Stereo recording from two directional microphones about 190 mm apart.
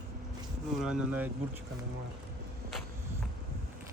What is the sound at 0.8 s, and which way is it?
Speech, 5° right (ahead or behind).